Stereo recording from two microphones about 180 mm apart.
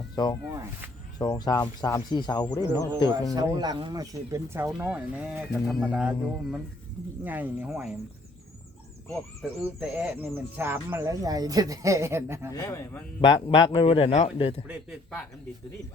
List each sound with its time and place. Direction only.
1.2 s speech: 20° left (ahead or behind)
3.3 s speech: 20° right (ahead or behind)
9.4 s speech: 5° right (ahead or behind)
12.5 s speech: 20° left (ahead or behind)
13.2 s speech: 30° left (ahead or behind)